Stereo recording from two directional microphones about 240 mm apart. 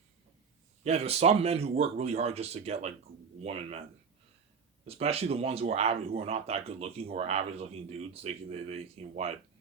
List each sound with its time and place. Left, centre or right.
0.9 s speech: right
4.9 s speech: right